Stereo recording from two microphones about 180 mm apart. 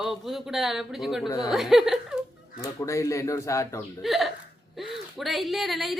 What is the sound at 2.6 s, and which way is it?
A man's voice, 15° left (ahead or behind).